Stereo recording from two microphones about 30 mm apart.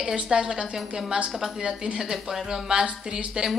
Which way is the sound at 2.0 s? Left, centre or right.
Centre.